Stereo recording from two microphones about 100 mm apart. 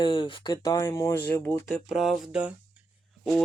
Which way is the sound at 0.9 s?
35° left (ahead or behind).